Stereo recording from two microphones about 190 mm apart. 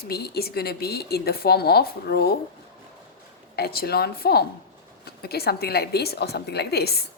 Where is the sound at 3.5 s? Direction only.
55° left (ahead or behind).